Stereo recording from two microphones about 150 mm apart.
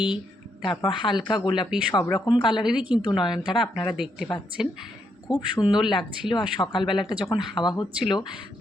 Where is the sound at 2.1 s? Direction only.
30° left (ahead or behind).